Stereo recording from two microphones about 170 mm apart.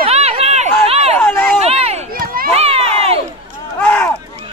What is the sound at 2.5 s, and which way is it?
Run, 35° right (ahead or behind).